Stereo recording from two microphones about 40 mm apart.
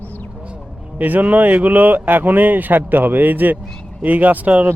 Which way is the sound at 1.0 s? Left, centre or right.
Right.